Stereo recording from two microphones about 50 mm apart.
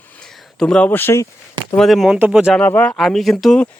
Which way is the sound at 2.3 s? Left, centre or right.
Centre.